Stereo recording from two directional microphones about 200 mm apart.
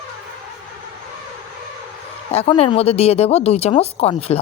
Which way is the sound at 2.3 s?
30° left (ahead or behind).